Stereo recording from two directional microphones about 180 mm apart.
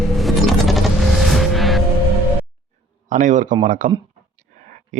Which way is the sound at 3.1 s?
45° right (ahead or behind).